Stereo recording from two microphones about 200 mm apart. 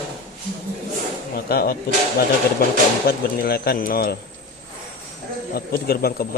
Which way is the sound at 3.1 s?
50° left (ahead or behind).